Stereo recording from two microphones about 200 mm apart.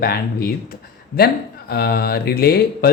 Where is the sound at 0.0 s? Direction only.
50° left (ahead or behind).